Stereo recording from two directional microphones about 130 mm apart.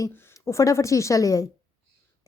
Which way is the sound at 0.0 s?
20° left (ahead or behind).